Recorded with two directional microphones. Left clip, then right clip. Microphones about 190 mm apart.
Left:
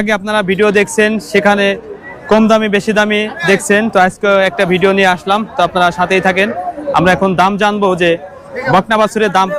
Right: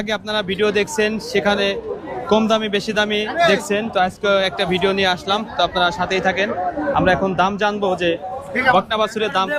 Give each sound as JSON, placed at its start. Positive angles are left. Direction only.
{"t": 0.0, "sound": "speech", "side_deg": 50}